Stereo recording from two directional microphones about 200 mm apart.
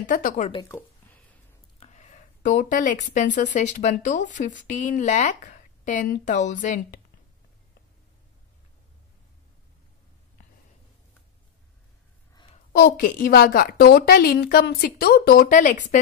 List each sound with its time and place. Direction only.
0.0 s a woman's voice: 45° left (ahead or behind)
0.5 s speech: 20° left (ahead or behind)
1.8 s speech: 35° left (ahead or behind)
12.7 s a woman's voice: 45° left (ahead or behind)